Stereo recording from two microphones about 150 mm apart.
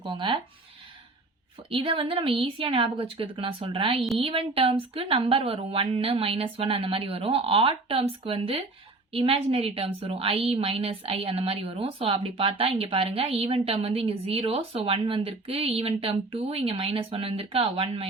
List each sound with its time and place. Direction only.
0.1 s a woman's voice: 35° right (ahead or behind)
1.7 s a woman's voice: 35° right (ahead or behind)